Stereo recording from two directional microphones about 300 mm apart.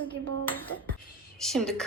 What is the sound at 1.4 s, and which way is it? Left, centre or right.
Speech, centre.